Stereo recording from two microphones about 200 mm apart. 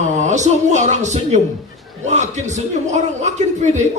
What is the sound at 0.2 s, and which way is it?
A man's voice, 35° right (ahead or behind).